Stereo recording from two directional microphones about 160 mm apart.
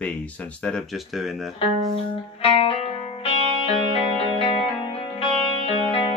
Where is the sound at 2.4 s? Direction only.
35° left (ahead or behind).